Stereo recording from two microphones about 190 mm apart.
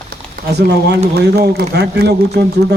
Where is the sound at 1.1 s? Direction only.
55° right (ahead or behind).